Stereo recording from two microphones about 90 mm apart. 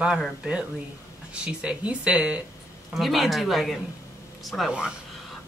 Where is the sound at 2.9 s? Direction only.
Centre (ahead or behind).